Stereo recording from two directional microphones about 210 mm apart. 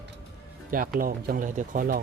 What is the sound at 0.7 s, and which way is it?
Speech, 40° right (ahead or behind).